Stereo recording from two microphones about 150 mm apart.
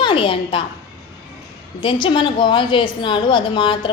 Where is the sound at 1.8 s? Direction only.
35° left (ahead or behind).